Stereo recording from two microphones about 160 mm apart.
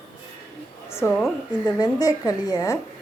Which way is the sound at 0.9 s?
15° left (ahead or behind).